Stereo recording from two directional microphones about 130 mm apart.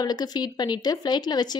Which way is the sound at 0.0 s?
30° left (ahead or behind).